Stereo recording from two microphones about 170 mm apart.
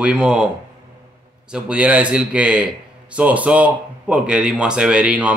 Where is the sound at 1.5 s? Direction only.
10° right (ahead or behind).